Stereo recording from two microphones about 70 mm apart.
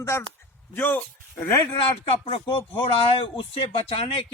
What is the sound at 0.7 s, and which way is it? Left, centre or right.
Speech, left.